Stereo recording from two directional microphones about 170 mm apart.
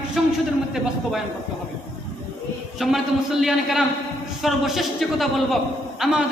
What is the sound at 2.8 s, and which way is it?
A man's voice, centre (ahead or behind).